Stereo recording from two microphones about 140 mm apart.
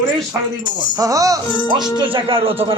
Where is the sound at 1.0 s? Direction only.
25° right (ahead or behind).